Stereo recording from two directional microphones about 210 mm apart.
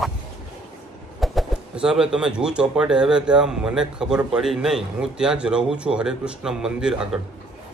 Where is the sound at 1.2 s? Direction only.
Centre (ahead or behind).